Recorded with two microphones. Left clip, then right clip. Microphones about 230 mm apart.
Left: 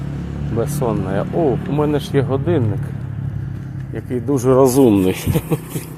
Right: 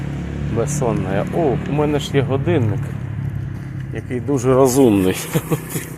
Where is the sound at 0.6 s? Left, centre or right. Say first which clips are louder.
Even; centre.